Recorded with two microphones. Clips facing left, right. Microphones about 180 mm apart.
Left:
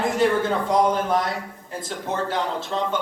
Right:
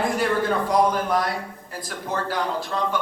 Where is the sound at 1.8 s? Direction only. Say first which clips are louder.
Left 1 dB; 25° left (ahead or behind).